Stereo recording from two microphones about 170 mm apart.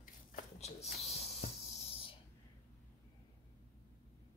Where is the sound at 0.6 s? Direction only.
40° left (ahead or behind).